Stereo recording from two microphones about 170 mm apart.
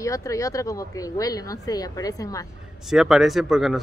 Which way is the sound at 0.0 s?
20° left (ahead or behind).